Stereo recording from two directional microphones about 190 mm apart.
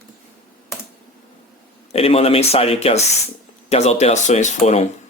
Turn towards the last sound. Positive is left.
turn(degrees=35)  # may be behind; listen again after turning